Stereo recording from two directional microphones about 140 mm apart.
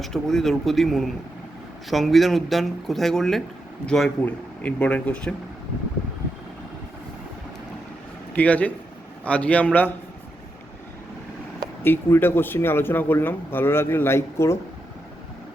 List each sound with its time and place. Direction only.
0.0 s speech: centre (ahead or behind)
8.4 s speech: 10° left (ahead or behind)
11.8 s speech: 15° left (ahead or behind)